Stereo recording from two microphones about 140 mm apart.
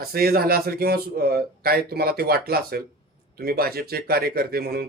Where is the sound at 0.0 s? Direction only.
90° right.